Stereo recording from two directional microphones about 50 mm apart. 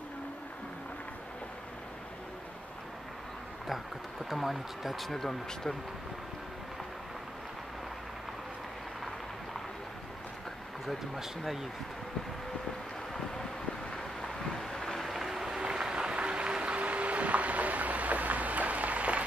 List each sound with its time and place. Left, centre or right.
4.3 s speech: centre
11.1 s speech: centre
14.6 s a sound: centre; by 19.2 s right